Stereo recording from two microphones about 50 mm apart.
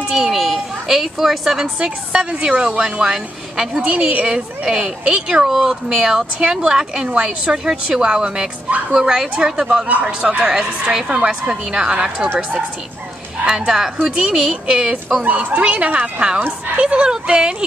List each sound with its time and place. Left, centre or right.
0.1 s a sound: centre
2.1 s a woman's voice: centre
3.8 s a woman's voice: right
5.5 s a woman's voice: centre
9.8 s speech: right
10.5 s a woman's voice: centre
13.5 s a woman's voice: centre
15.2 s speech: right